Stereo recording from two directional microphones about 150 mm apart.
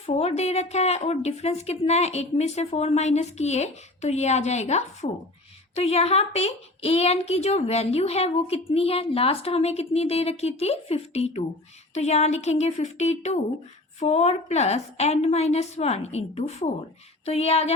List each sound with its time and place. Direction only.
0.0 s a woman's voice: 45° left (ahead or behind)